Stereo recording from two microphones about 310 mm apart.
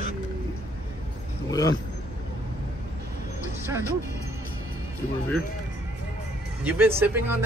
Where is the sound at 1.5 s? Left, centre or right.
Centre.